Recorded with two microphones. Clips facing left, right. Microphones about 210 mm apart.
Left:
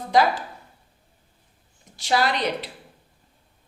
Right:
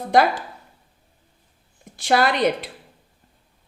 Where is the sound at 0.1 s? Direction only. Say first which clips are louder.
Right 2 dB; 55° right (ahead or behind).